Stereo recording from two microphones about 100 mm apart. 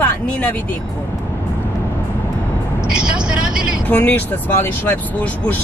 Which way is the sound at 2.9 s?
10° right (ahead or behind).